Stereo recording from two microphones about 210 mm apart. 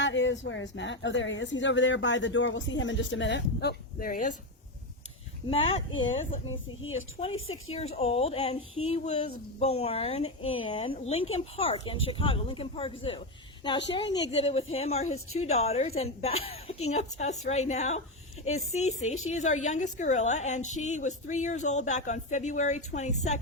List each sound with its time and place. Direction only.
0.0 s a woman's voice: 60° left (ahead or behind); by 4.4 s 40° left (ahead or behind)
6.0 s a woman's voice: 30° left (ahead or behind)
7.3 s a woman's voice: 70° left (ahead or behind)
7.7 s a woman's voice: 30° left (ahead or behind)